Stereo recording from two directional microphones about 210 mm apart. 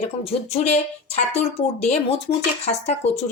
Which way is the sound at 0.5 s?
30° left (ahead or behind).